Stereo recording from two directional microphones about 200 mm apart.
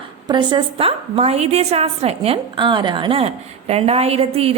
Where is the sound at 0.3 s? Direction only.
25° right (ahead or behind).